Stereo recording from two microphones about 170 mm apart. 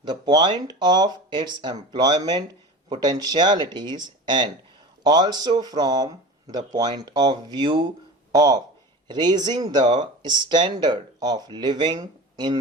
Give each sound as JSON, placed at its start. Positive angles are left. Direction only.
{"t": 0.0, "sound": "speech", "side_deg": -25}